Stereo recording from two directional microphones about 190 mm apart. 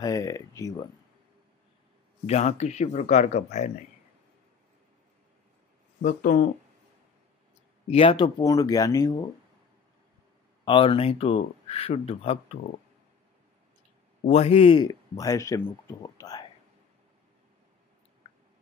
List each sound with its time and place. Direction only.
0.0 s speech: 20° left (ahead or behind)
2.2 s speech: 35° left (ahead or behind)
6.0 s speech: 45° left (ahead or behind)
7.9 s speech: 30° left (ahead or behind)
10.6 s speech: 25° left (ahead or behind)
14.2 s speech: 30° left (ahead or behind)